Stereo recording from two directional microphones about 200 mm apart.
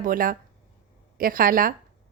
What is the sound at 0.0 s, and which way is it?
A woman's voice, 45° right (ahead or behind).